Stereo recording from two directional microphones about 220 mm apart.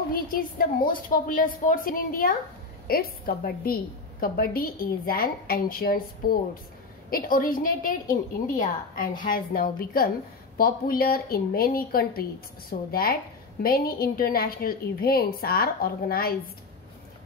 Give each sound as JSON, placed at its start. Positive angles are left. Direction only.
{"t": 0.1, "sound": "a woman's voice", "side_deg": 40}